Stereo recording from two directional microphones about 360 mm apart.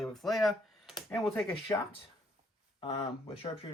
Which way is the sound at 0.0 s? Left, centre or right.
Centre.